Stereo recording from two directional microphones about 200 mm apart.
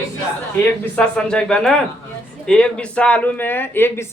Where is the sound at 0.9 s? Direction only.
5° left (ahead or behind).